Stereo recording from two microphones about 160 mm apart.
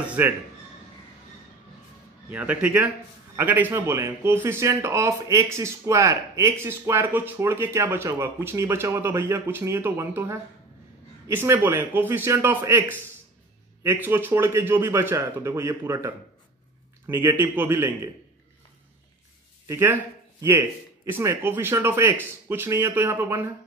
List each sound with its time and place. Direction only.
0.0 s music: 10° right (ahead or behind)
2.3 s a man's voice: 10° right (ahead or behind)
17.1 s a man's voice: 15° right (ahead or behind)
19.7 s a man's voice: 15° right (ahead or behind)